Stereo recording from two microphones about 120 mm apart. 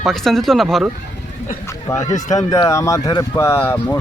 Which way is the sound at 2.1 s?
85° left.